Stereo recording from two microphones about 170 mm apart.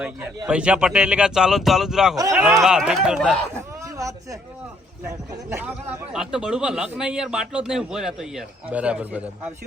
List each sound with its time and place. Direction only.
0.4 s a man's voice: 5° right (ahead or behind)
3.8 s a sound: 20° right (ahead or behind)
6.1 s a man's voice: 5° right (ahead or behind)